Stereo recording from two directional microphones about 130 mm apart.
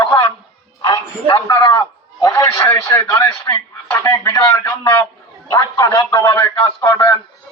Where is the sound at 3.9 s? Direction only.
20° left (ahead or behind).